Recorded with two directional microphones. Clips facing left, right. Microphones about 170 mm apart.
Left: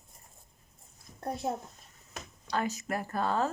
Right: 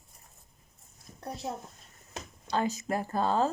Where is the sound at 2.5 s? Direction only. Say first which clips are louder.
Right 2 dB; 25° right (ahead or behind).